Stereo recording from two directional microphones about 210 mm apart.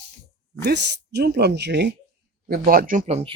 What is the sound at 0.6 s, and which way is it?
Speech, 55° right (ahead or behind).